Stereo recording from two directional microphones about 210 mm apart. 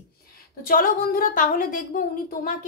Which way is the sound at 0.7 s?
40° left (ahead or behind).